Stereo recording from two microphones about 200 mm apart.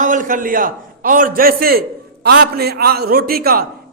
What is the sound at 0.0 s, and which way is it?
A man's voice, 40° right (ahead or behind).